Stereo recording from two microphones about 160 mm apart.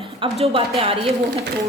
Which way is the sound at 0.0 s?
35° right (ahead or behind).